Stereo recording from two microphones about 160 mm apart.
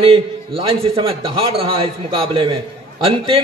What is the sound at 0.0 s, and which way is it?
A man's voice, 35° right (ahead or behind).